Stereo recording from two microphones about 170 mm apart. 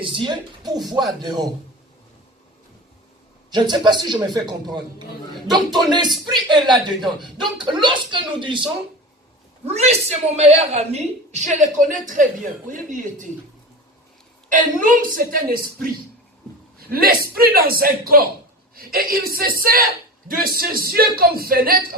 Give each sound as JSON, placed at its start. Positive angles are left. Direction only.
{"t": 0.0, "sound": "speech", "side_deg": -30}
{"t": 3.5, "sound": "speech", "side_deg": -25}
{"t": 9.6, "sound": "a woman's voice", "side_deg": -40}
{"t": 14.5, "sound": "a woman's voice", "side_deg": -50}